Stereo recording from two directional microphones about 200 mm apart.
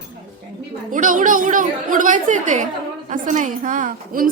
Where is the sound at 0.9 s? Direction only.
40° right (ahead or behind).